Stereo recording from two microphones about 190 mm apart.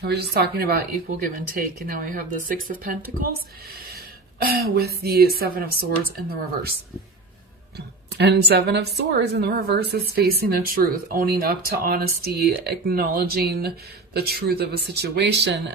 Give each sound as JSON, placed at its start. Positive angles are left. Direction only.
{"t": 0.0, "sound": "speech", "side_deg": -55}
{"t": 8.2, "sound": "speech", "side_deg": -60}